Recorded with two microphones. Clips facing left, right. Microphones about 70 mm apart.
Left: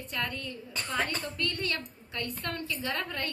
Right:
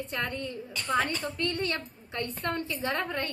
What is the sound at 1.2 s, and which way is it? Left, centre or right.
A woman's voice, right.